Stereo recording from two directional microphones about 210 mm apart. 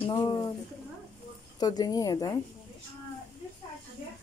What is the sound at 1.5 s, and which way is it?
Speech, 20° left (ahead or behind).